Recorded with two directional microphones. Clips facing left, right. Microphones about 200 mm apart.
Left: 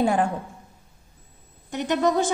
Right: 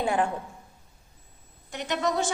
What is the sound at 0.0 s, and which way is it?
Speech, 40° left (ahead or behind).